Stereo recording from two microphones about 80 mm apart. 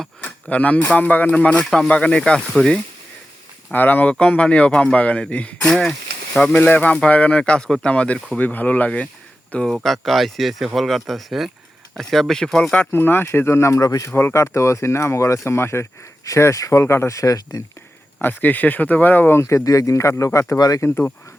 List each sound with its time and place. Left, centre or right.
0.4 s speech: centre
9.8 s speech: centre
12.9 s speech: left
14.1 s speech: left
18.2 s speech: left
19.4 s speech: left